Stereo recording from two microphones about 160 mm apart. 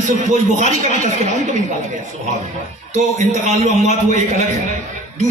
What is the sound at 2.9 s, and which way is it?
Speech, 45° right (ahead or behind).